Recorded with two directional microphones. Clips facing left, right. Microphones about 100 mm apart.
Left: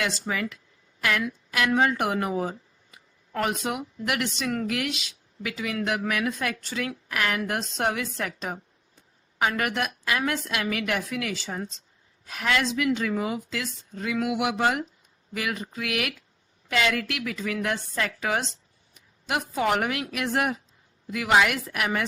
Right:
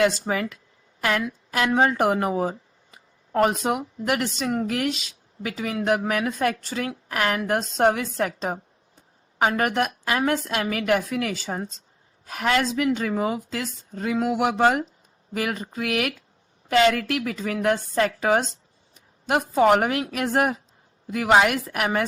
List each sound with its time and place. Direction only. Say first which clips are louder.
0.0 s a woman's voice: right 7 dB; 45° right (ahead or behind)